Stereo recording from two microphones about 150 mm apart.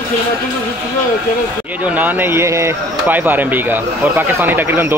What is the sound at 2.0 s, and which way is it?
Speech, 10° right (ahead or behind).